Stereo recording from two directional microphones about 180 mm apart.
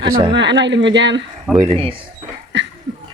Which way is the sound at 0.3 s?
80° right.